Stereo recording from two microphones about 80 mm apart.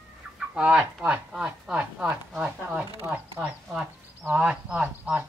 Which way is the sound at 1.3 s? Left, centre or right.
Centre.